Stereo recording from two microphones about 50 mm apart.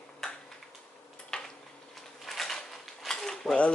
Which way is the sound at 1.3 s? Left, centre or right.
Centre.